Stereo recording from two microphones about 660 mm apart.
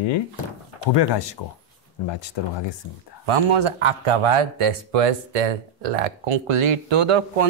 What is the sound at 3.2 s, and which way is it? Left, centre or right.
Speech, right.